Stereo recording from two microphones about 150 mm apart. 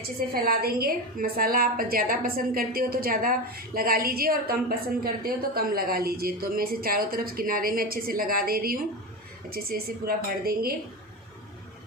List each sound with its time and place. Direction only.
0.2 s a woman's voice: 85° right